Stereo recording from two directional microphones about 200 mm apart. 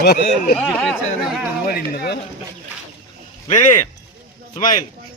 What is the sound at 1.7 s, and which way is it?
Speech, 50° left (ahead or behind).